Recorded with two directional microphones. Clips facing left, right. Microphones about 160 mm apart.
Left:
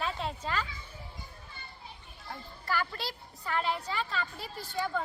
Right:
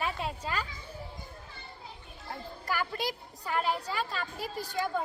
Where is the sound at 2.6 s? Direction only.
15° right (ahead or behind).